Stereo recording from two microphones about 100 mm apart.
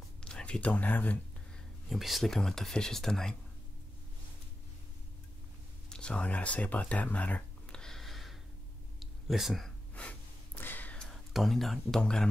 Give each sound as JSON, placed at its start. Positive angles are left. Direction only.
{"t": 0.2, "sound": "speech", "side_deg": 10}
{"t": 1.9, "sound": "speech", "side_deg": 0}
{"t": 5.9, "sound": "a sound", "side_deg": 10}
{"t": 9.9, "sound": "gasp", "side_deg": 15}
{"t": 11.3, "sound": "speech", "side_deg": 0}